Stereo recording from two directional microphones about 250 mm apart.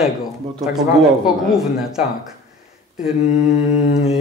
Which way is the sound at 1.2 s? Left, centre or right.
Centre.